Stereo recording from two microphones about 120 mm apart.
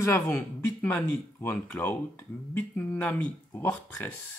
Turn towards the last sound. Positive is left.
turn(degrees=15)  # may be behind; listen again after turning